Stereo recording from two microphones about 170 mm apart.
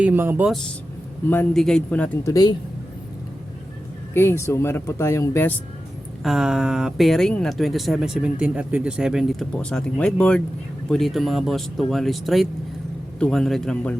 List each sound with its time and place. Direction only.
0.0 s speech: 10° right (ahead or behind)
1.3 s speech: 5° left (ahead or behind)
2.3 s speech: 20° left (ahead or behind)
4.1 s speech: 15° left (ahead or behind)
6.2 s speech: 5° right (ahead or behind)